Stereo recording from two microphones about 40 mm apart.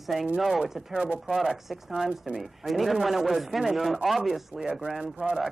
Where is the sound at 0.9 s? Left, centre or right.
Right.